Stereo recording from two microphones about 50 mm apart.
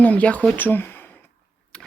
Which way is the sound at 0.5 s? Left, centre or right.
Left.